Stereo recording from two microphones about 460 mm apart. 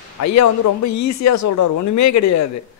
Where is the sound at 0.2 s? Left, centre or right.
Left.